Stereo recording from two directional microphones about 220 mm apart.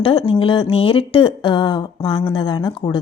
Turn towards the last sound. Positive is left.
turn(degrees=20)  # may be behind; listen again after turning